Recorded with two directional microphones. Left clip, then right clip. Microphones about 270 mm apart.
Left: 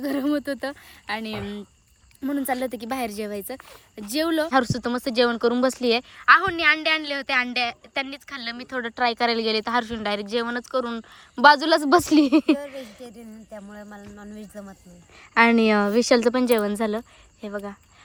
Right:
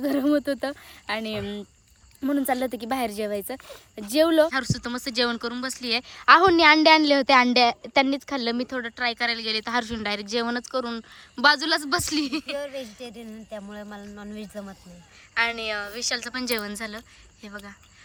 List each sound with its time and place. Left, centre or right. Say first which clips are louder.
0.0 s speech: right 2 dB; centre
13.0 s speech: right 2 dB; centre
15.4 s a woman's voice: left 8 dB; centre